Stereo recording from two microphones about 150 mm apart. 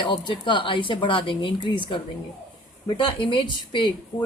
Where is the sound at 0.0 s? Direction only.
30° left (ahead or behind).